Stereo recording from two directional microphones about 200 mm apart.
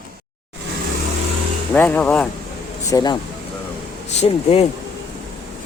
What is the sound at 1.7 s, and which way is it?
Speech, 10° left (ahead or behind).